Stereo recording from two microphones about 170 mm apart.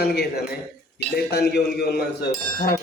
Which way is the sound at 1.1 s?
65° left (ahead or behind).